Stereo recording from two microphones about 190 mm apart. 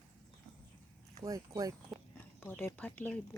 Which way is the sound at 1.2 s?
20° right (ahead or behind).